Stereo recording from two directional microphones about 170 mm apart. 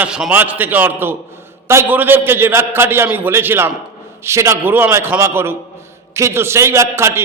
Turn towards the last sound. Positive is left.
turn(degrees=-15)  # may be behind; listen again after turning